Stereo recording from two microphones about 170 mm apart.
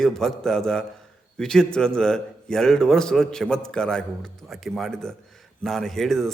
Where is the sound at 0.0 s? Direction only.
Centre (ahead or behind).